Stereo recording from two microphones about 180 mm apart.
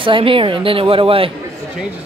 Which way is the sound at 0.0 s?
30° right (ahead or behind).